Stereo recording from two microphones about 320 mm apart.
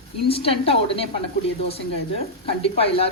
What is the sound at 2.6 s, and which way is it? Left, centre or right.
Speech, centre.